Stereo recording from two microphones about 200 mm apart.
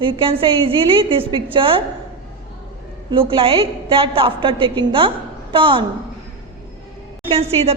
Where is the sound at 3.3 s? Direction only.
25° right (ahead or behind).